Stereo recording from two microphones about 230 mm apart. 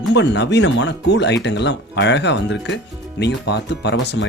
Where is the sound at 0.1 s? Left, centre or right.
Left.